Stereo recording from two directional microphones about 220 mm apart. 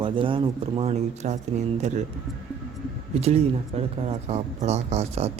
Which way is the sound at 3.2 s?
30° right (ahead or behind).